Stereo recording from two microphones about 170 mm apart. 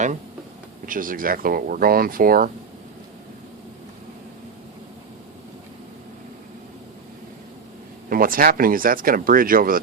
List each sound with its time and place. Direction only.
0.9 s speech: 55° right (ahead or behind)
8.1 s speech: 55° right (ahead or behind)